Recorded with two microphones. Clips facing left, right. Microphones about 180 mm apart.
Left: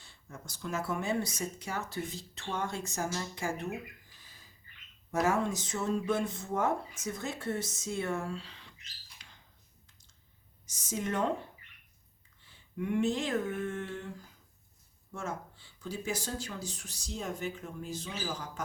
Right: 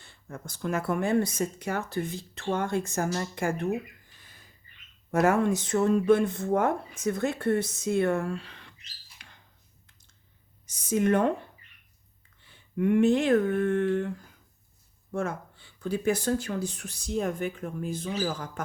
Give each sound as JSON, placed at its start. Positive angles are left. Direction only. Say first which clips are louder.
{"t": 0.0, "sound": "speech", "louder": "right 7 dB", "side_deg": -60}
{"t": 4.2, "sound": "a sound", "louder": "right 3 dB", "side_deg": -60}
{"t": 5.1, "sound": "speech", "louder": "right 6 dB", "side_deg": -60}
{"t": 9.2, "sound": "a sound", "louder": "right 5 dB", "side_deg": -60}
{"t": 10.7, "sound": "speech", "louder": "right 11 dB", "side_deg": -60}
{"t": 12.4, "sound": "speech", "louder": "right 9 dB", "side_deg": -60}
{"t": 15.1, "sound": "speech", "louder": "right 8 dB", "side_deg": -60}